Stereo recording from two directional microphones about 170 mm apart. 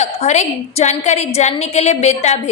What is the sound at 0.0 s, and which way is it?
A woman's voice, 40° left (ahead or behind).